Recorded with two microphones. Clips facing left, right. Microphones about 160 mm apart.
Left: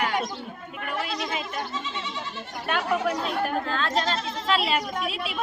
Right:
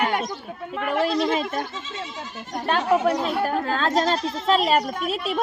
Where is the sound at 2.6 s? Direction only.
35° right (ahead or behind).